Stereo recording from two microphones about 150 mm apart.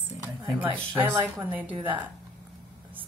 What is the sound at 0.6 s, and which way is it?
Speech, 10° right (ahead or behind).